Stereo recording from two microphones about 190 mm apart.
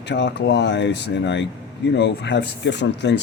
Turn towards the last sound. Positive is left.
turn(degrees=65)  # may be behind; listen again after turning